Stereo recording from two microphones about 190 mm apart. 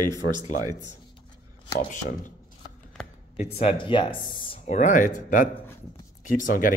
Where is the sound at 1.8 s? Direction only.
45° left (ahead or behind).